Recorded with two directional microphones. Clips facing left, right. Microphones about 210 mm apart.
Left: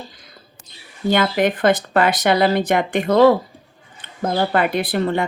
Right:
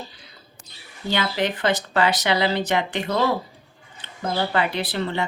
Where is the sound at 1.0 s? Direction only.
50° left (ahead or behind).